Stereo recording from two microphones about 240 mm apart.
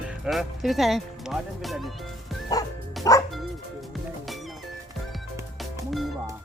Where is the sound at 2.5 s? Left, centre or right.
Centre.